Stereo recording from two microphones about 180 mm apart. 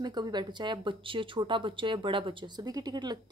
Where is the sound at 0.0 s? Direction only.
25° right (ahead or behind).